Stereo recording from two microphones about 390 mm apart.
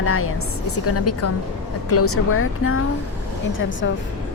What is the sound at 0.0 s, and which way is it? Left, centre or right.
A woman's voice, left.